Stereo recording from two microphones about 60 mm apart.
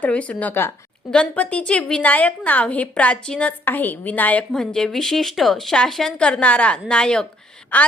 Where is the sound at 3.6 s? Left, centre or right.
Left.